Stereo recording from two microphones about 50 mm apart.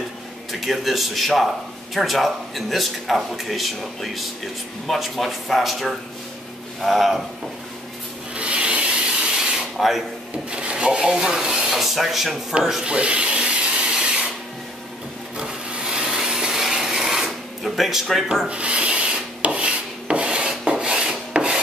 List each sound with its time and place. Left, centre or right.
0.5 s speech: centre
8.4 s rub: right
9.2 s rub: centre
9.8 s speech: centre
10.5 s rub: right
11.0 s speech: centre
11.7 s speech: centre
12.8 s a sound: right
15.3 s wood: centre
17.6 s speech: centre
18.5 s rub: right
20.8 s filing: centre